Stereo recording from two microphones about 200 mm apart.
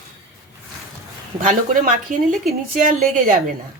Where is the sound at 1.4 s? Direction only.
40° right (ahead or behind).